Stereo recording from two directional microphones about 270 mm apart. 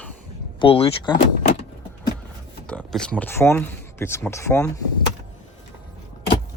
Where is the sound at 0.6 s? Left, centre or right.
Left.